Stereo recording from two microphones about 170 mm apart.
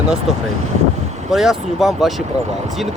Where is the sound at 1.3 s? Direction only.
Centre (ahead or behind).